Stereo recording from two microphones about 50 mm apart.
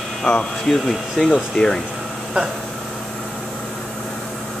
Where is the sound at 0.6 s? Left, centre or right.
Centre.